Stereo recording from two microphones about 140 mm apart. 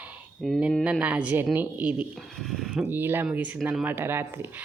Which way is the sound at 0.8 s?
10° right (ahead or behind).